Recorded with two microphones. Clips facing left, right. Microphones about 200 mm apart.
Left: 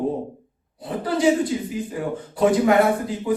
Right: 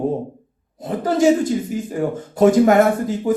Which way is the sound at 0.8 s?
45° right (ahead or behind).